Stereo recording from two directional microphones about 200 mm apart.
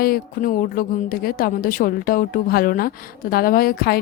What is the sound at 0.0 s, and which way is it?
A woman's voice, 45° left (ahead or behind).